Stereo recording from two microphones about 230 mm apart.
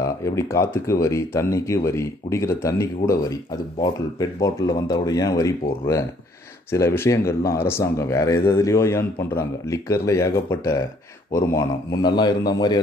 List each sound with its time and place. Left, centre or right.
0.0 s speech: centre